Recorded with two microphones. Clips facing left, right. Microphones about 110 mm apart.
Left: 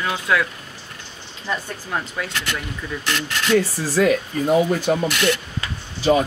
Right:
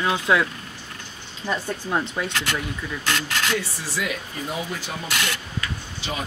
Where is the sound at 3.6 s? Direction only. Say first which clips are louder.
Left 10 dB; 40° left (ahead or behind).